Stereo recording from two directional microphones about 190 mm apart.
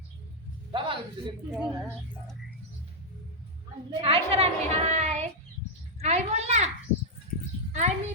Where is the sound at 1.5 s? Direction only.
Centre (ahead or behind).